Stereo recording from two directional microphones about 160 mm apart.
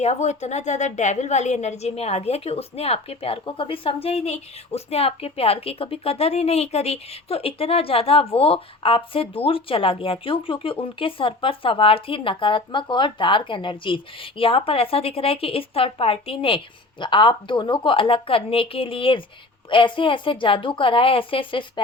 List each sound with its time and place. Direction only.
0.0 s a woman's voice: 45° left (ahead or behind)